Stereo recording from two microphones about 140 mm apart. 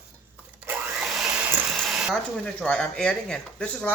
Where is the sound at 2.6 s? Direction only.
10° left (ahead or behind).